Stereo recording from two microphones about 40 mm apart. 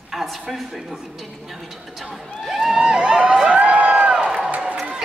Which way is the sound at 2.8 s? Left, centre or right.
Right.